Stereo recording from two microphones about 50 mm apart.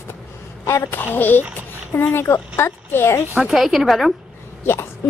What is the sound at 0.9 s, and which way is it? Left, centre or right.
Speech, left.